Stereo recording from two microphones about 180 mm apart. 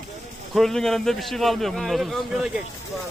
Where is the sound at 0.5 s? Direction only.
Centre (ahead or behind).